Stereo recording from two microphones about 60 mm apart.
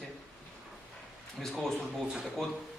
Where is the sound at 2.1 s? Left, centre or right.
Centre.